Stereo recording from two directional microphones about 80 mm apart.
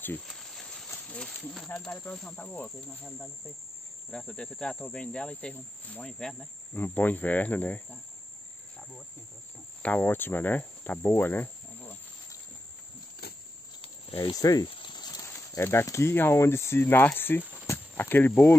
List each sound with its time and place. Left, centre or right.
0.2 s a sound: centre
1.0 s speech: centre
2.3 s speech: left
4.1 s speech: centre
9.8 s speech: left
13.7 s cricket: left
14.3 s speech: left
14.7 s snake: left
15.2 s speech: left